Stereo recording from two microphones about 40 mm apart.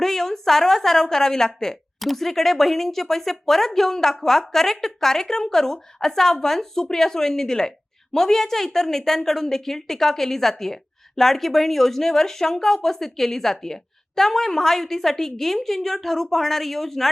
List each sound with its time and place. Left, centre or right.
0.0 s a woman's voice: centre
2.0 s speech: centre